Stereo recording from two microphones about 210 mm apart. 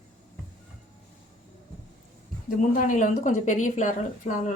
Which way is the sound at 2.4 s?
40° left (ahead or behind).